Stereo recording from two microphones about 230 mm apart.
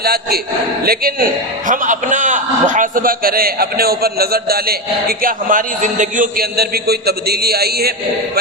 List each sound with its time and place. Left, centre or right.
0.0 s a man's voice: right